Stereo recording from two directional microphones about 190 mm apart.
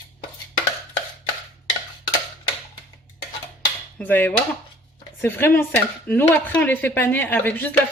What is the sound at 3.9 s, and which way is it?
Speech, 10° left (ahead or behind).